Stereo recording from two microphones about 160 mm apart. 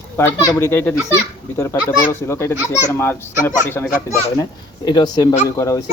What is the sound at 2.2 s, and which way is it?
Speech, 15° left (ahead or behind).